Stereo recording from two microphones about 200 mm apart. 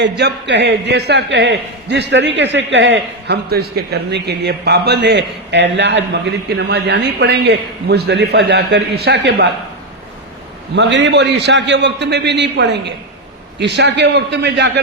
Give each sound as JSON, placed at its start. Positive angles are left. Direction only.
{"t": 0.0, "sound": "a man's voice", "side_deg": -60}
{"t": 10.8, "sound": "a man's voice", "side_deg": -60}